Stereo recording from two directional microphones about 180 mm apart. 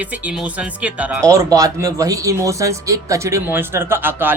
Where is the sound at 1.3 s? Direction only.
20° right (ahead or behind).